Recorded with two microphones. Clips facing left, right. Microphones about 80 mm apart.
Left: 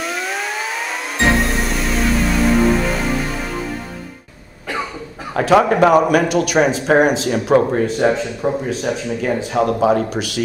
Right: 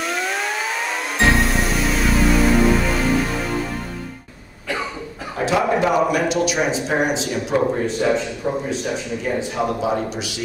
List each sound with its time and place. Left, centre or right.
0.0 s vehicle: centre
1.1 s music: centre
5.3 s speech: left